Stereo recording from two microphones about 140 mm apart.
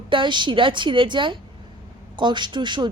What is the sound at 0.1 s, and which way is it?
Speech, 35° right (ahead or behind).